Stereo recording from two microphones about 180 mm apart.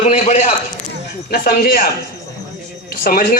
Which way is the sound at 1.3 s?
55° left (ahead or behind).